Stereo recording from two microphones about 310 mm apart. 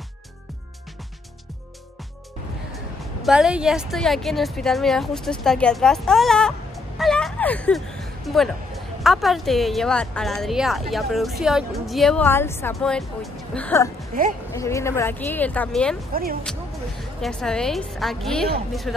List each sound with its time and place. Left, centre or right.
2.7 s a woman's voice: centre
16.1 s speech: right
17.2 s a woman's voice: centre